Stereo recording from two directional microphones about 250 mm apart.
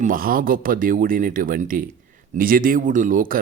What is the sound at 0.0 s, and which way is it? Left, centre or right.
Speech, right.